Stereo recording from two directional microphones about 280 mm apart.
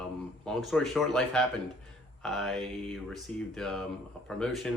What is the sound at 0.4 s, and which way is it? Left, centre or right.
Speech, centre.